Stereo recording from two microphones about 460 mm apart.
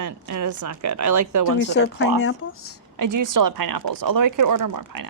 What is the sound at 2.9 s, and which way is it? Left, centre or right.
Speech, right.